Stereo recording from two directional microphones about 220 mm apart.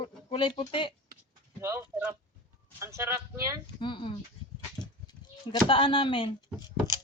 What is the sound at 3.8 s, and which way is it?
Speech, 20° left (ahead or behind).